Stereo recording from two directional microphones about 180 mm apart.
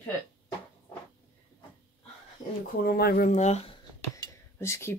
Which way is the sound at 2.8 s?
60° left (ahead or behind).